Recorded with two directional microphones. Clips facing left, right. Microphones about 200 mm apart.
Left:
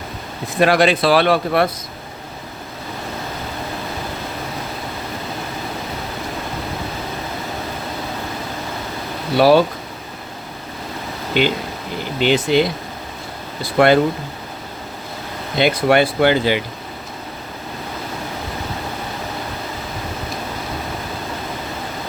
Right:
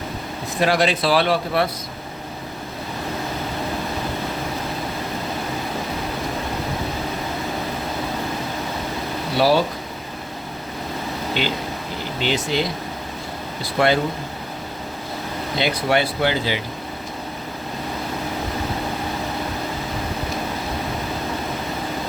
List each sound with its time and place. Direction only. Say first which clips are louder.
0.6 s speech: left 5 dB; 60° left (ahead or behind)
9.4 s speech: left 5 dB; 55° left (ahead or behind)
11.3 s speech: left 9 dB; 55° left (ahead or behind)
13.7 s speech: left 6 dB; 55° left (ahead or behind)
15.5 s speech: left 6 dB; 55° left (ahead or behind)